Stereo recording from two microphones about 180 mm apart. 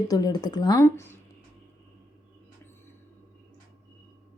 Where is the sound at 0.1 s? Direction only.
20° left (ahead or behind).